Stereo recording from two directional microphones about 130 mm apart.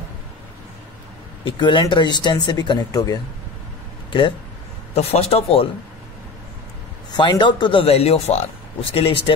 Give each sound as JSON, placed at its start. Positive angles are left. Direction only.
{"t": 1.4, "sound": "speech", "side_deg": 40}
{"t": 4.9, "sound": "speech", "side_deg": 55}
{"t": 7.1, "sound": "speech", "side_deg": 35}